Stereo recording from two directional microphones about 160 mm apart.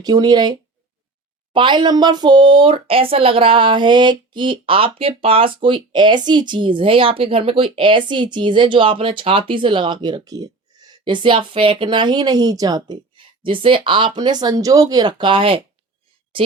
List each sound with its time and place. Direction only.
0.0 s a woman's voice: 25° right (ahead or behind)